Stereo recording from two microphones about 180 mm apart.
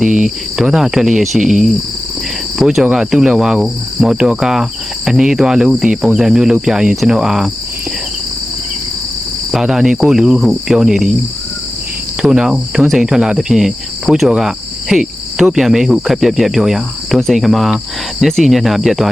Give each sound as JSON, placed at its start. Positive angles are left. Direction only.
{"t": 0.0, "sound": "cricket", "side_deg": 0}
{"t": 9.5, "sound": "cricket", "side_deg": 0}
{"t": 12.2, "sound": "cricket", "side_deg": -5}